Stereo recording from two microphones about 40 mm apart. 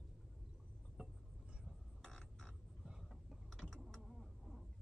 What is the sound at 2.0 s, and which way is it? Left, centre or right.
Mechanisms, centre.